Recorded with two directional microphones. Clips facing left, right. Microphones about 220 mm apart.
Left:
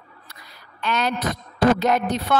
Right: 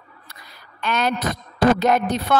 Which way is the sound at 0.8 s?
50° right (ahead or behind).